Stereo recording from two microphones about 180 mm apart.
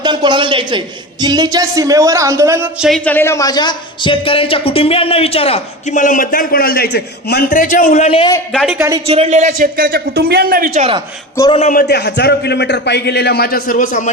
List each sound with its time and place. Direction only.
0.0 s a man's voice: 25° right (ahead or behind)
2.8 s speech: 5° left (ahead or behind); by 8.3 s 35° left (ahead or behind)
8.7 s speech: 15° right (ahead or behind)
9.0 s speech: 35° right (ahead or behind)
9.5 s speech: 55° right (ahead or behind)
10.8 s speech: 30° right (ahead or behind)
11.5 s a man's voice: 45° left (ahead or behind)